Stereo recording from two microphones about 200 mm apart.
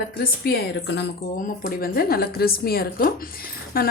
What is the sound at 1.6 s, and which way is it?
Speech, 50° left (ahead or behind).